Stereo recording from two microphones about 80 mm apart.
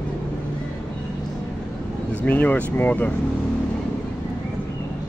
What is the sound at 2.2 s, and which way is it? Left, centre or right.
Speech, left.